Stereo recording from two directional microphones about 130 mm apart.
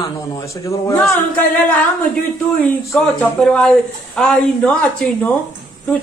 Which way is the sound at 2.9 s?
5° left (ahead or behind).